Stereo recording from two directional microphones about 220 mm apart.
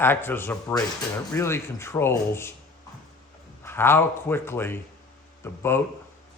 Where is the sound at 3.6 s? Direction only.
10° left (ahead or behind).